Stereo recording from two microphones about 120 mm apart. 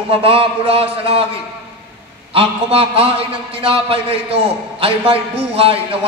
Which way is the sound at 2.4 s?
55° right (ahead or behind).